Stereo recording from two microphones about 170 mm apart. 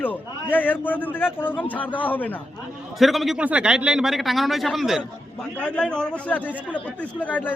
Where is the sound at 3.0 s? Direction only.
Centre (ahead or behind).